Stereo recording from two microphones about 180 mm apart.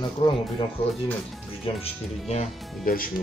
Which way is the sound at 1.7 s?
30° left (ahead or behind).